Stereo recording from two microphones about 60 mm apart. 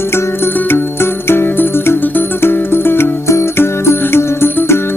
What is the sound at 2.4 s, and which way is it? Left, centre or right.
Music, left.